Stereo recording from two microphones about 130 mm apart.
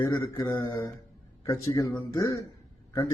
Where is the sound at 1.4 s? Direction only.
25° left (ahead or behind).